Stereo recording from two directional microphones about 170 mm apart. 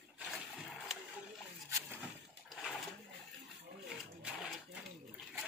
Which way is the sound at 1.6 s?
15° right (ahead or behind).